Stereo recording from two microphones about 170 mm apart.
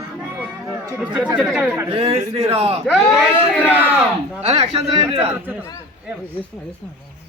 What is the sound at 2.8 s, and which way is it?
Speech, 5° right (ahead or behind).